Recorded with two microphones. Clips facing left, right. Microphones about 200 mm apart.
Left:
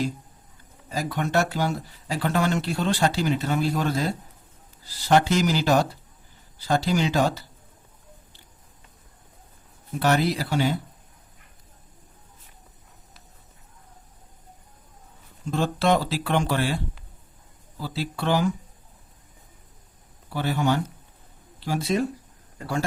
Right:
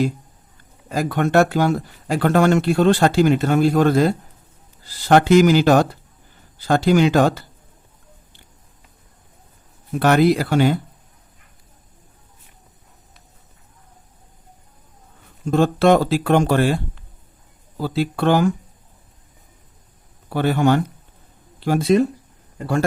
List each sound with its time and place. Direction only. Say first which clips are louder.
0.9 s speech: right 7 dB; 55° right (ahead or behind)
10.0 s speech: right 7 dB; 55° right (ahead or behind)
15.4 s speech: right 8 dB; 50° right (ahead or behind)
20.3 s speech: right 7 dB; 55° right (ahead or behind)